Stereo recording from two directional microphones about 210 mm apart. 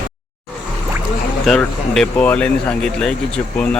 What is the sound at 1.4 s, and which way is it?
Speech, centre (ahead or behind).